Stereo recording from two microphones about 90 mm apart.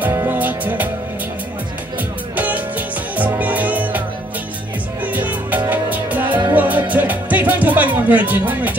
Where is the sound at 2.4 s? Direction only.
20° right (ahead or behind).